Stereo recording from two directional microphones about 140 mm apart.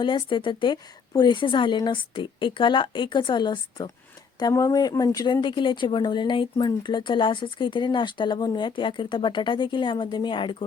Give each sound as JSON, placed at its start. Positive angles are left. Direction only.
{"t": 0.0, "sound": "speech", "side_deg": 35}